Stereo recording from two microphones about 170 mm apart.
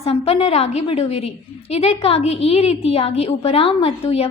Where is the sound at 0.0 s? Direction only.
35° left (ahead or behind).